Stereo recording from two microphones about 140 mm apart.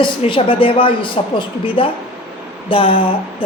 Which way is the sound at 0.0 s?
40° left (ahead or behind).